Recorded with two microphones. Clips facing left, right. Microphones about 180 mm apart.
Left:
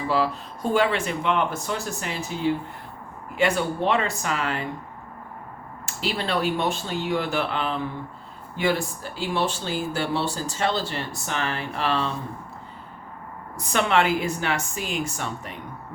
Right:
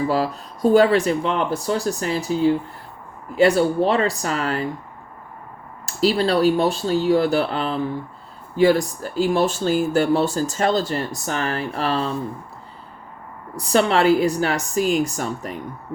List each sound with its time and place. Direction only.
0.1 s speech: 40° right (ahead or behind)
5.8 s speech: 35° right (ahead or behind)
13.6 s speech: 35° right (ahead or behind)